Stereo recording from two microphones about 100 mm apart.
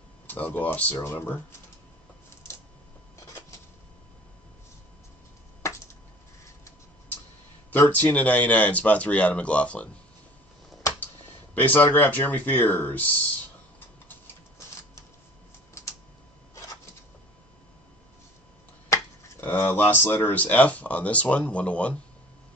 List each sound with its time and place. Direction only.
0.3 s speech: 20° left (ahead or behind)
5.6 s a sound: 25° left (ahead or behind)
7.7 s speech: 20° left (ahead or behind)
11.5 s speech: 15° left (ahead or behind)
19.4 s speech: 20° left (ahead or behind)